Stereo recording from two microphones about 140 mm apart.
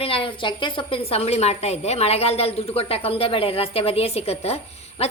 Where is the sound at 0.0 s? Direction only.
40° left (ahead or behind).